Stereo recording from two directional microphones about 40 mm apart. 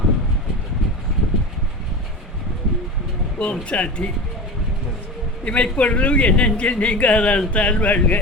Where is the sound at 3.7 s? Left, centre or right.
Left.